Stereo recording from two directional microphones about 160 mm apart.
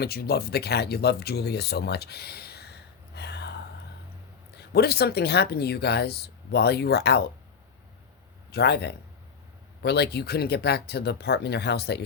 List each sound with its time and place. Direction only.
0.0 s speech: 80° left
4.5 s speech: 85° left
8.5 s speech: 90° left